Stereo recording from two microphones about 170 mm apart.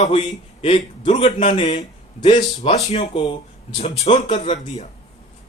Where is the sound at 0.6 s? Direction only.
35° left (ahead or behind).